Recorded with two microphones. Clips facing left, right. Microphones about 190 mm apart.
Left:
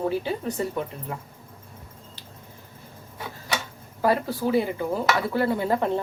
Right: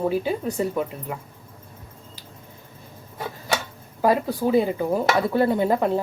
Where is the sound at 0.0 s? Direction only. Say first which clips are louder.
Right 3 dB; 15° right (ahead or behind).